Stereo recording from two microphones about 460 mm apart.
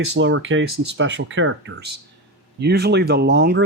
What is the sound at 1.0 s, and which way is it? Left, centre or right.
Speech, right.